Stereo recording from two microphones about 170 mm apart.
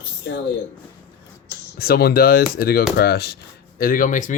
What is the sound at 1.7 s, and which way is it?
Speech, 65° left (ahead or behind).